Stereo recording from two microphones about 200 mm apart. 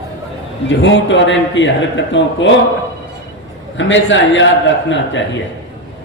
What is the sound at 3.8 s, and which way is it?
Speech, 70° left (ahead or behind).